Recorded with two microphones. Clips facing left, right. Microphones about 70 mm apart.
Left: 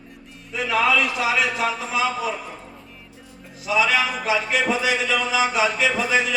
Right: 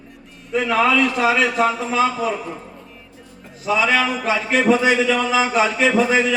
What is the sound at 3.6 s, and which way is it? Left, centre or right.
A man's voice, right.